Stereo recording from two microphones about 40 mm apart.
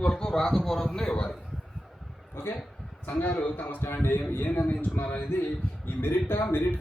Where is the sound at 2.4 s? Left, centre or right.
Left.